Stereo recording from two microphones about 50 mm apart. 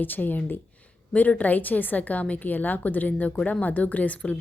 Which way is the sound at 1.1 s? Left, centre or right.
Left.